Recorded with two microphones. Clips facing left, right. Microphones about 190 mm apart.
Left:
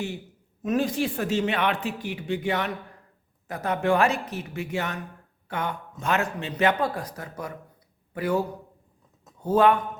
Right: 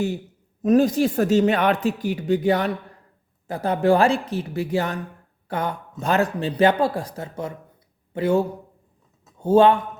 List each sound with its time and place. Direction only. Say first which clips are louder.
0.6 s a man's voice: right 8 dB; 40° right (ahead or behind)